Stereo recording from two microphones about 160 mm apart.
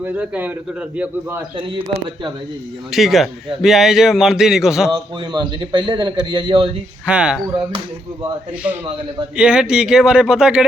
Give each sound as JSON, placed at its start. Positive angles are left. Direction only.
{"t": 0.0, "sound": "a man's voice", "side_deg": -10}
{"t": 1.5, "sound": "speech", "side_deg": -35}
{"t": 2.9, "sound": "a man's voice", "side_deg": 0}
{"t": 4.9, "sound": "a man's voice", "side_deg": -30}
{"t": 7.0, "sound": "a man's voice", "side_deg": -5}
{"t": 9.3, "sound": "a man's voice", "side_deg": -5}